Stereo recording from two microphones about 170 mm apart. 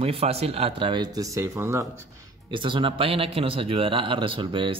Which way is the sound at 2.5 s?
30° right (ahead or behind).